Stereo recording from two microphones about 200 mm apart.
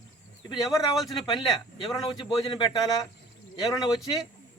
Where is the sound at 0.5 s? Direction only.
20° left (ahead or behind).